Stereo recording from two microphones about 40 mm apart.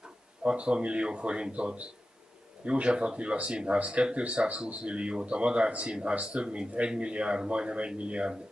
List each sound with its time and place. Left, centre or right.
0.4 s speech: right